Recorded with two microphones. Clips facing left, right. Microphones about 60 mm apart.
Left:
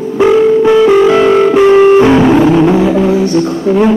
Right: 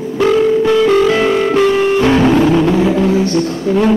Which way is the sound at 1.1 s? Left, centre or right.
Left.